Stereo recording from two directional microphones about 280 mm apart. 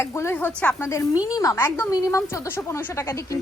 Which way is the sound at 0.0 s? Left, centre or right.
Centre.